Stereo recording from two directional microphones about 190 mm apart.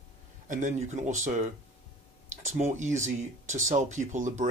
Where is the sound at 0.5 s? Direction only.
40° right (ahead or behind).